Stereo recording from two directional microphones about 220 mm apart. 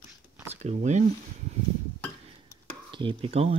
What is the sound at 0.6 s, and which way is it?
Speech, 30° right (ahead or behind).